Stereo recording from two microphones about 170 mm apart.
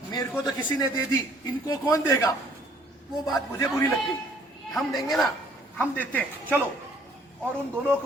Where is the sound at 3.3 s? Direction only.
15° left (ahead or behind).